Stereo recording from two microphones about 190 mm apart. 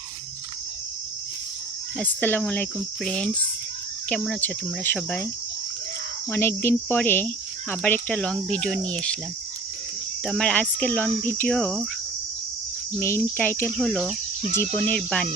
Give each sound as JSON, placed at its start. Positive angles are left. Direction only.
{"t": 2.0, "sound": "speech", "side_deg": 10}
{"t": 6.3, "sound": "speech", "side_deg": 10}
{"t": 10.2, "sound": "speech", "side_deg": 5}
{"t": 13.0, "sound": "speech", "side_deg": 15}